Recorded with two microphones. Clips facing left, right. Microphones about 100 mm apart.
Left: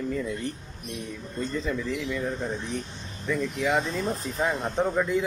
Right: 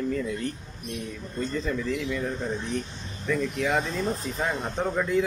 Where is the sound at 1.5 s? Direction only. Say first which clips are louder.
Right 1 dB; centre (ahead or behind).